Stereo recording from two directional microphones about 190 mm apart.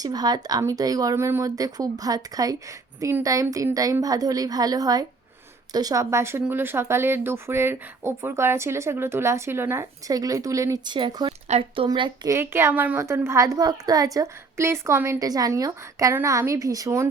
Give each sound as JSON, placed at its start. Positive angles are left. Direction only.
{"t": 0.0, "sound": "a woman's voice", "side_deg": -20}